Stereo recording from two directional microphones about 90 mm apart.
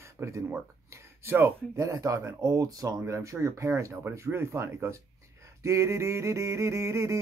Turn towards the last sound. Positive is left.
turn(degrees=-30)  # may be behind; listen again after turning